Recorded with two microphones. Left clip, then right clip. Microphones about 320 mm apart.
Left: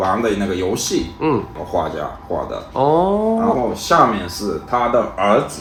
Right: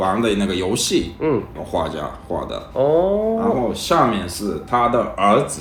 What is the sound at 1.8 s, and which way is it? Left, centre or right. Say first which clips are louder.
Speech: left 2 dB; right.